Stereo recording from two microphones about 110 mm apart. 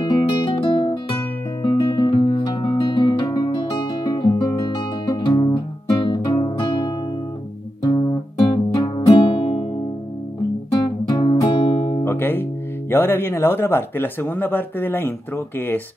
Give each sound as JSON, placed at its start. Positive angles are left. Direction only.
{"t": 0.0, "sound": "guitar", "side_deg": 45}
{"t": 1.6, "sound": "music", "side_deg": 40}
{"t": 3.7, "sound": "guitar", "side_deg": 45}
{"t": 4.7, "sound": "music", "side_deg": 45}
{"t": 10.8, "sound": "music", "side_deg": 45}
{"t": 12.0, "sound": "guitar", "side_deg": 20}
{"t": 12.9, "sound": "speech", "side_deg": 20}